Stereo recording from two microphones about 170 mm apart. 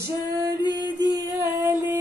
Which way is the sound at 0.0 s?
20° right (ahead or behind).